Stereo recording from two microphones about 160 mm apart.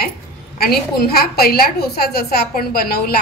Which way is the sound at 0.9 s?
75° left (ahead or behind).